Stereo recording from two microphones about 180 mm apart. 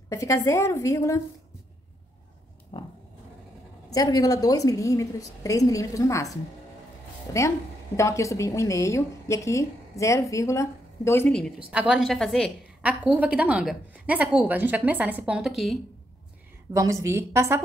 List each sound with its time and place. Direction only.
0.1 s a woman's voice: 15° left (ahead or behind)
2.7 s roaring cats: 25° left (ahead or behind)
3.9 s a woman's voice: 20° left (ahead or behind)
7.3 s a woman's voice: 15° left (ahead or behind)
11.7 s a woman's voice: 5° right (ahead or behind)
12.8 s a woman's voice: 5° right (ahead or behind)
16.7 s a woman's voice: 15° right (ahead or behind)